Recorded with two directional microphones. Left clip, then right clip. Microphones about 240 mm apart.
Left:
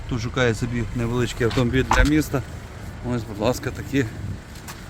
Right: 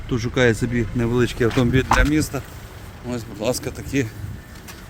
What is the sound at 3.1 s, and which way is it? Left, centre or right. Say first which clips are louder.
Speech: even; centre.